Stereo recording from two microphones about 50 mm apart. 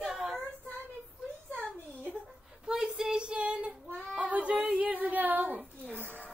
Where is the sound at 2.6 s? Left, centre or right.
Centre.